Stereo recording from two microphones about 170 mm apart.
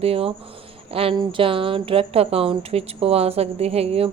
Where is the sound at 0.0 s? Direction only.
35° right (ahead or behind).